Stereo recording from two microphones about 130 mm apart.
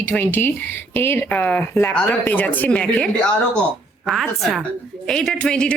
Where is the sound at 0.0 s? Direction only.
15° left (ahead or behind).